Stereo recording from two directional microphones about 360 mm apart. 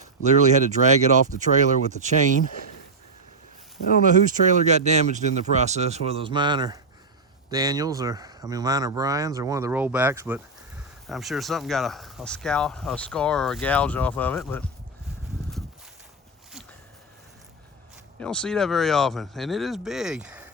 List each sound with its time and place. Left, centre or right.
0.0 s speech: centre
4.4 s speech: centre
18.2 s speech: centre